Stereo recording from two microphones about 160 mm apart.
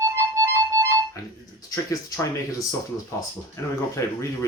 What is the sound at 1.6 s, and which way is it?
Speech, 20° left (ahead or behind).